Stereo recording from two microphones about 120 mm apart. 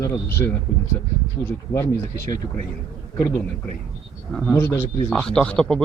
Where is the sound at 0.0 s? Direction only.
20° left (ahead or behind).